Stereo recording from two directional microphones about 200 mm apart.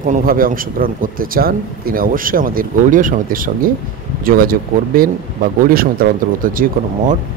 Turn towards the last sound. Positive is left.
turn(degrees=-45)  # may be behind; listen again after turning